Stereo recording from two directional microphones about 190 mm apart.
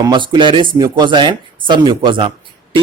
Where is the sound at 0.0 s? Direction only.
25° right (ahead or behind).